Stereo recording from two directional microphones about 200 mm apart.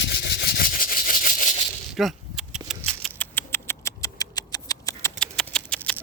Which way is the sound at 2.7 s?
5° left (ahead or behind).